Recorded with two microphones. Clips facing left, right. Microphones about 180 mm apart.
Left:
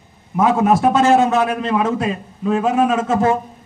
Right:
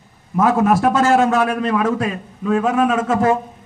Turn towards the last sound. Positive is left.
turn(degrees=25)  # may be behind; listen again after turning